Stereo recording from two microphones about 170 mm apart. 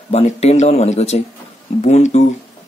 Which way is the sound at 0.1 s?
40° left (ahead or behind).